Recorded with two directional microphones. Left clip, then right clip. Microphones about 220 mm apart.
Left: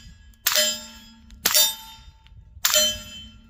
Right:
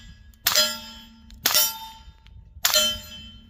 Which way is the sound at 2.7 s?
10° right (ahead or behind).